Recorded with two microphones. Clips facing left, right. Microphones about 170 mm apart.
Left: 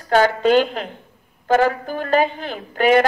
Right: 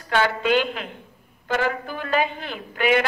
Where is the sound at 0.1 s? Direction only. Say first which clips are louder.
Left 6 dB; 40° left (ahead or behind).